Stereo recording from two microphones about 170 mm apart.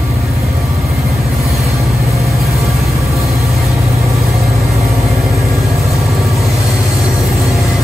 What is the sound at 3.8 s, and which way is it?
Vehicle, 15° right (ahead or behind).